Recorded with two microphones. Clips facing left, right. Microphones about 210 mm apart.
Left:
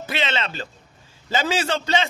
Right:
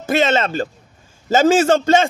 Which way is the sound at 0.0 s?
45° right (ahead or behind).